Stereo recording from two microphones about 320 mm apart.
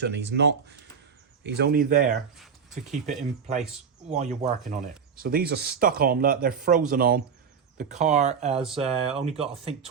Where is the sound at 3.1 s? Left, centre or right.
Right.